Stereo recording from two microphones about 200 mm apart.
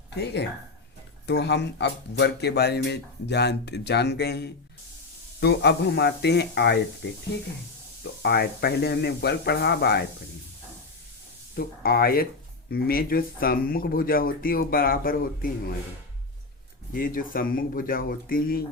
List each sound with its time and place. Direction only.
0.1 s speech: 55° left (ahead or behind)
8.2 s speech: 50° left (ahead or behind)
11.5 s speech: 50° left (ahead or behind)
16.9 s speech: 45° left (ahead or behind)